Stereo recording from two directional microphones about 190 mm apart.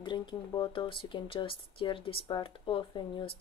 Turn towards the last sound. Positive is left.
turn(degrees=25)  # may be behind; listen again after turning